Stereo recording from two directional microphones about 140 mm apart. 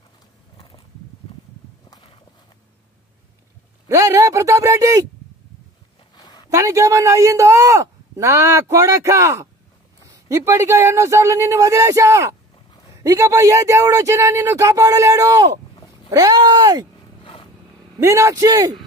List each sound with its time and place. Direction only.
1.9 s walk: 35° left (ahead or behind)
3.9 s speech: 25° right (ahead or behind)
6.1 s a sound: 30° left (ahead or behind)
6.5 s speech: 20° right (ahead or behind)
17.2 s vehicle: 35° left (ahead or behind)
18.0 s speech: 20° right (ahead or behind)